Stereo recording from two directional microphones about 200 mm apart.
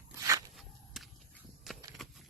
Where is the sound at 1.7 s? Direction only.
Centre (ahead or behind).